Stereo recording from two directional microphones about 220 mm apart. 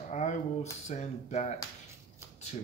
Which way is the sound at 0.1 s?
35° left (ahead or behind).